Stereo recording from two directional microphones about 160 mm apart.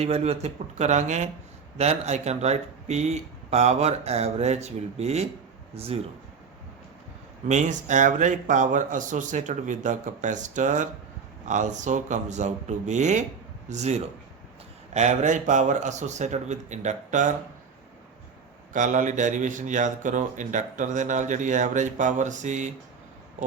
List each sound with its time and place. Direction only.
0.0 s speech: 40° right (ahead or behind)
7.4 s speech: 50° right (ahead or behind)
18.7 s speech: 50° right (ahead or behind)